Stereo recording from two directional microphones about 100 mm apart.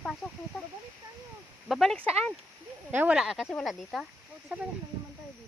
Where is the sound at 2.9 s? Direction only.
20° right (ahead or behind).